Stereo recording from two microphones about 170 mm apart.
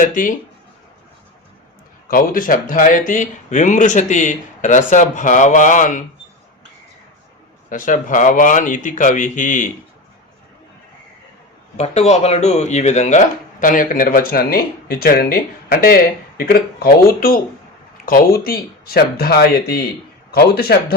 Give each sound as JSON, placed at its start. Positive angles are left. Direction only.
{"t": 0.0, "sound": "speech", "side_deg": 50}
{"t": 2.0, "sound": "speech", "side_deg": 55}
{"t": 7.7, "sound": "speech", "side_deg": 50}
{"t": 11.8, "sound": "a man's voice", "side_deg": 40}